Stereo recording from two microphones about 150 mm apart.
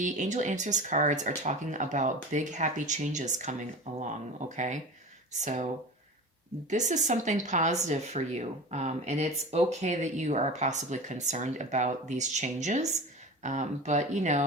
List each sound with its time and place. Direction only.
0.0 s speech: 55° right (ahead or behind)
6.7 s speech: 50° right (ahead or behind)